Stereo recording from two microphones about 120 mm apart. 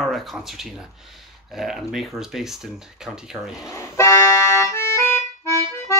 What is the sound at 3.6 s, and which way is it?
Accordion, 25° left (ahead or behind).